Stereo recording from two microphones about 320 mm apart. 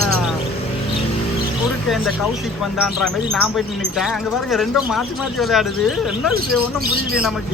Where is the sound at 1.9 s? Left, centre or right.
Centre.